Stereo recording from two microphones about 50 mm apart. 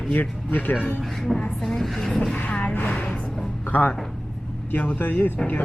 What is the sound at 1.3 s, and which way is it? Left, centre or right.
Speech, centre.